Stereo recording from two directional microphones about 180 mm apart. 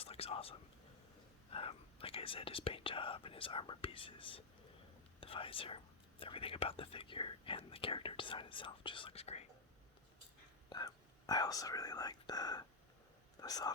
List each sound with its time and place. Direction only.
0.0 s whispering: 35° left (ahead or behind)
1.5 s speech: 30° left (ahead or behind)
10.7 s speech: 20° left (ahead or behind)